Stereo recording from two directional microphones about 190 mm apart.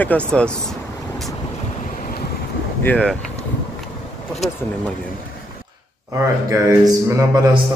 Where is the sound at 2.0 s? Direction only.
50° left (ahead or behind).